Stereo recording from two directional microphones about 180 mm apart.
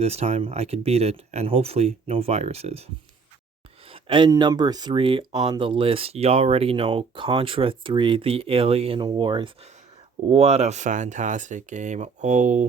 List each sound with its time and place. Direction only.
0.0 s speech: 35° right (ahead or behind)
10.2 s speech: 35° right (ahead or behind)